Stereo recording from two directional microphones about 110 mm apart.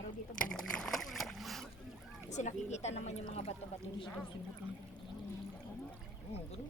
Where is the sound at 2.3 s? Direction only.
90° left.